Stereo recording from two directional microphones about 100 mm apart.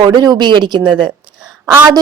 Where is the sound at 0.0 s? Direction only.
45° right (ahead or behind).